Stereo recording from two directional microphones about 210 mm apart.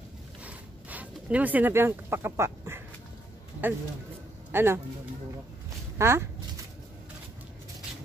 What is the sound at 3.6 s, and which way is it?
Speech, 10° right (ahead or behind).